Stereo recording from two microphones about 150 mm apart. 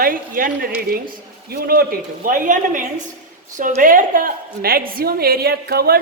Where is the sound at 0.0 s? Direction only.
70° right (ahead or behind).